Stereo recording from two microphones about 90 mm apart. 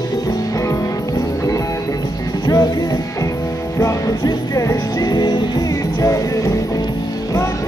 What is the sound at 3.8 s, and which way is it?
Music, 40° left (ahead or behind).